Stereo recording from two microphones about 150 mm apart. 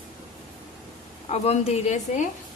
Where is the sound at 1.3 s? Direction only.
45° left (ahead or behind).